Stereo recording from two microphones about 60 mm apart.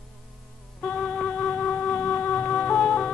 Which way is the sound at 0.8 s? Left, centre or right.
Centre.